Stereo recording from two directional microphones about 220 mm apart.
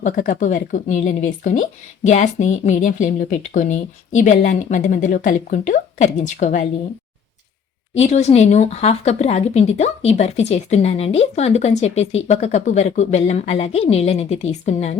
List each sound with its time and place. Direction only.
0.0 s speech: 35° left (ahead or behind)
7.9 s speech: 30° left (ahead or behind)